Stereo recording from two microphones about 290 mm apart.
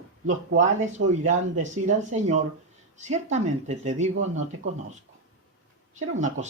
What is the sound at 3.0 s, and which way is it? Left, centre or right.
Speech, right.